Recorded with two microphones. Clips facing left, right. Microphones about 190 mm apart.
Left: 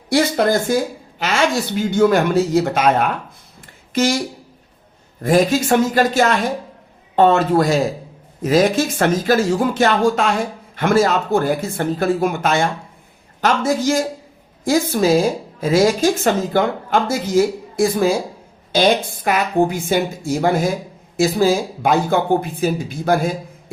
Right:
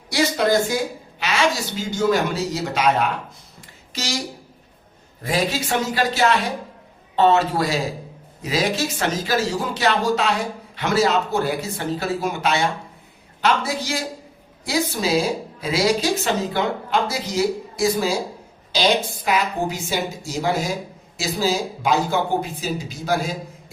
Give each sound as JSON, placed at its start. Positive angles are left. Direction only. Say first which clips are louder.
{"t": 0.1, "sound": "speech", "louder": "left 3 dB", "side_deg": 50}
{"t": 5.2, "sound": "speech", "louder": "left 8 dB", "side_deg": 50}